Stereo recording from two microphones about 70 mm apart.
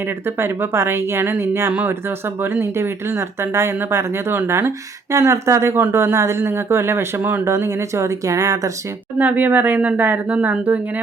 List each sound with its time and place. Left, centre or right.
0.3 s speech: right
5.1 s speech: right
9.1 s speech: right